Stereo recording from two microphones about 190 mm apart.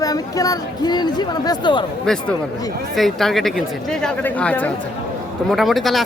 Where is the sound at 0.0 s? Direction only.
20° left (ahead or behind).